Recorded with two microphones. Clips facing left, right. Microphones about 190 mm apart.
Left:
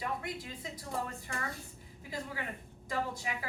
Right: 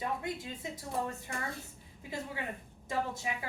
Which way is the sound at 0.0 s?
25° right (ahead or behind).